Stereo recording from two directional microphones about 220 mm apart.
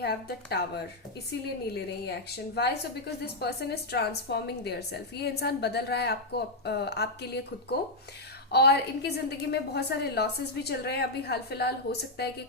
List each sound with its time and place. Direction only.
0.0 s a woman's voice: 45° left (ahead or behind)